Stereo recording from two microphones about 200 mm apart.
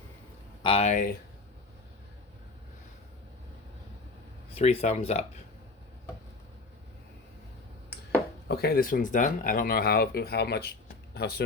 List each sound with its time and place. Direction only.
0.6 s speech: 30° left (ahead or behind)
4.5 s speech: 30° left (ahead or behind)
8.4 s speech: 50° left (ahead or behind)